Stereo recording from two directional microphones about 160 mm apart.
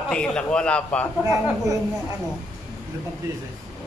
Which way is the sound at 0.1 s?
5° left (ahead or behind).